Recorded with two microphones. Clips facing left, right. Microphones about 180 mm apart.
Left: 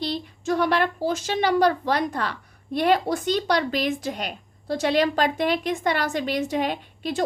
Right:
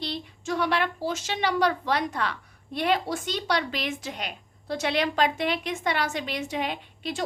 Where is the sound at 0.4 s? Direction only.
45° left (ahead or behind).